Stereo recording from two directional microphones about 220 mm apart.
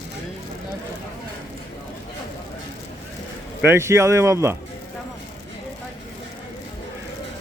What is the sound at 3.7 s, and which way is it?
Speech, 10° right (ahead or behind).